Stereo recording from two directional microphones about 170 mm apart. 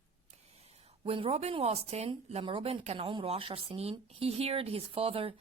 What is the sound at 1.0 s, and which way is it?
Speech, 35° right (ahead or behind).